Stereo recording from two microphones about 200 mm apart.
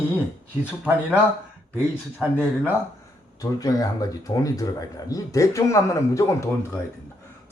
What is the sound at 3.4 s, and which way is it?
Speech, 20° left (ahead or behind).